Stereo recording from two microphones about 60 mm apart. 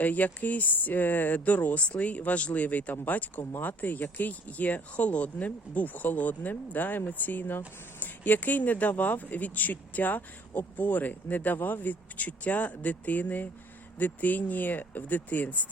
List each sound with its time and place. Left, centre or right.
0.0 s speech: left